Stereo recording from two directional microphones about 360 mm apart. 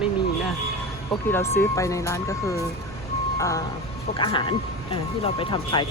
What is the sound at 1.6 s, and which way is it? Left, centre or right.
Speech, centre.